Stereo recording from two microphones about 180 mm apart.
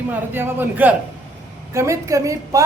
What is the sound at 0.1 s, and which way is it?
A woman's voice, 10° right (ahead or behind).